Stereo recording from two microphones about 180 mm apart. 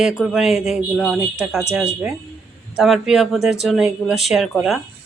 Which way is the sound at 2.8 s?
5° right (ahead or behind).